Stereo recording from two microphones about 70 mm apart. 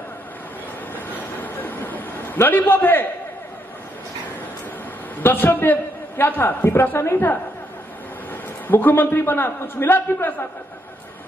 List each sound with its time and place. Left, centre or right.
0.9 s train: left
2.4 s a man's voice: left
5.2 s a man's voice: left
8.3 s a man's voice: left